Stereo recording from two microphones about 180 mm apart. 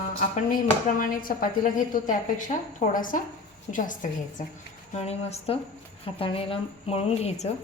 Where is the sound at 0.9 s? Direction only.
50° left (ahead or behind).